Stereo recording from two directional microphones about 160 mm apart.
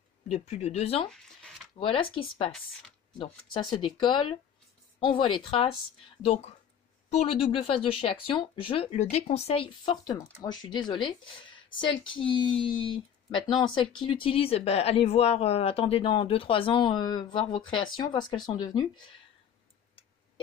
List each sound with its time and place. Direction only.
0.3 s speech: 45° left (ahead or behind)
1.0 s speech: 5° left (ahead or behind)
1.8 s speech: 35° left (ahead or behind)
9.8 s speech: 25° left (ahead or behind)